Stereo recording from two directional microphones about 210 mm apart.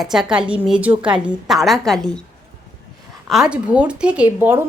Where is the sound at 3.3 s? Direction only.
5° right (ahead or behind).